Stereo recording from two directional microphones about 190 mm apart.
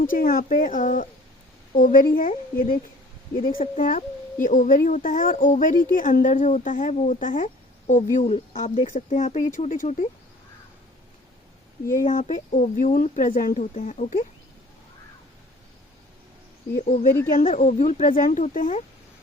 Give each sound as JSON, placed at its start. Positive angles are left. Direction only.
{"t": 0.0, "sound": "speech", "side_deg": 45}
{"t": 11.9, "sound": "speech", "side_deg": 45}
{"t": 16.7, "sound": "speech", "side_deg": 40}